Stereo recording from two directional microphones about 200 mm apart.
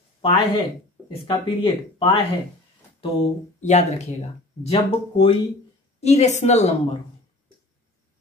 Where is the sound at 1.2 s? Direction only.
25° left (ahead or behind).